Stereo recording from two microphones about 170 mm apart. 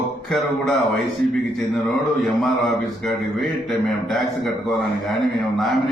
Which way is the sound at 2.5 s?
Centre (ahead or behind).